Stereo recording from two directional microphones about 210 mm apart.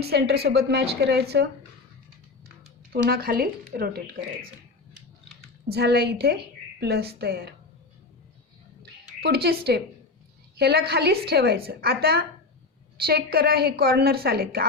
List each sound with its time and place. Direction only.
0.0 s a woman's voice: 50° right (ahead or behind)
2.9 s a woman's voice: 45° right (ahead or behind)
5.6 s a woman's voice: 50° right (ahead or behind)
8.8 s a sound: 50° right (ahead or behind)
10.6 s a woman's voice: 50° right (ahead or behind)